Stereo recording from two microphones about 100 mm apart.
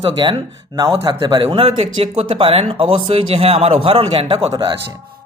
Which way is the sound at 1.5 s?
75° right (ahead or behind).